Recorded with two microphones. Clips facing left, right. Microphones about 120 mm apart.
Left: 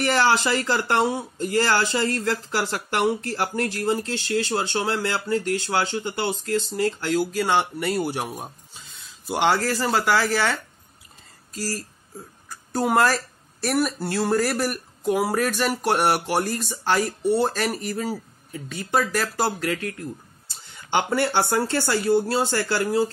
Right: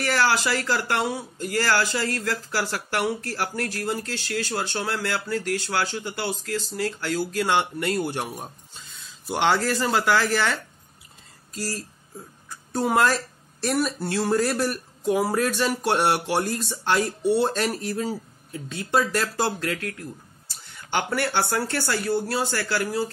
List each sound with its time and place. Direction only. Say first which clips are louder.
0.0 s speech: left 2 dB; 20° left (ahead or behind)
7.2 s speech: left 1 dB; 5° left (ahead or behind)
20.9 s speech: left 3 dB; 20° left (ahead or behind)